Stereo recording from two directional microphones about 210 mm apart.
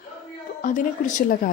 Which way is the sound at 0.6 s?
40° left (ahead or behind).